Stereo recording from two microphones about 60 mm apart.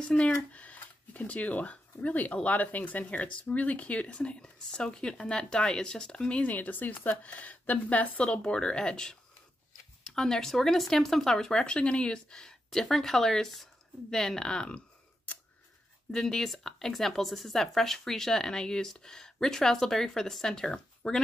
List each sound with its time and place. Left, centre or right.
0.0 s speech: centre
16.1 s speech: centre